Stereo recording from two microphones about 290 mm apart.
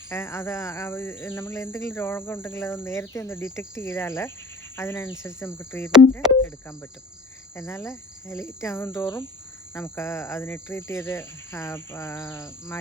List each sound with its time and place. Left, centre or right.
0.1 s speech: centre
7.5 s speech: centre